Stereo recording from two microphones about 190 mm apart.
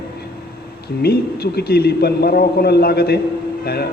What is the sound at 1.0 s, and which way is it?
Speech, 55° left (ahead or behind).